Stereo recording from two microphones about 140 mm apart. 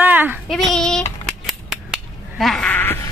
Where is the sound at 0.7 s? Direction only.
5° left (ahead or behind).